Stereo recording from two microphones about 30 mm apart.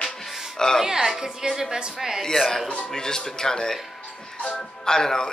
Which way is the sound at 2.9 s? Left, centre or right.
Centre.